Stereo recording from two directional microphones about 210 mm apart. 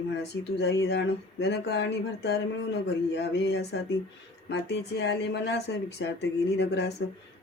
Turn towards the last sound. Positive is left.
turn(degrees=50)  # may be behind; listen again after turning